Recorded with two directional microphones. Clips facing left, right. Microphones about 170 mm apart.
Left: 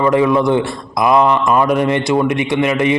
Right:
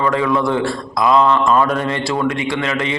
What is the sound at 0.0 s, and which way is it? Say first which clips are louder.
A man's voice: left 4 dB; 20° left (ahead or behind).